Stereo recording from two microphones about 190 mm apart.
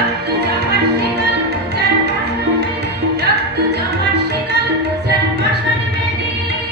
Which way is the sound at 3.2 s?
55° right (ahead or behind).